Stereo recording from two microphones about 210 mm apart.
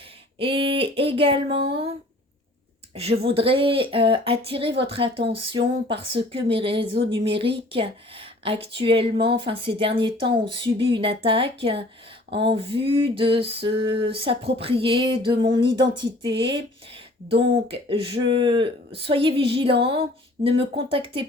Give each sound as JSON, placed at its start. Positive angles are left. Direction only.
{"t": 0.3, "sound": "speech", "side_deg": -25}
{"t": 2.9, "sound": "speech", "side_deg": -30}